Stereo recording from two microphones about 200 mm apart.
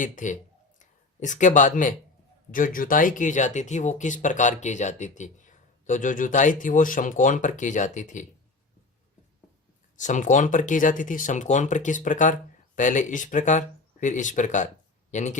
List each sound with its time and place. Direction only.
0.0 s speech: 40° left (ahead or behind)
10.0 s speech: 40° left (ahead or behind)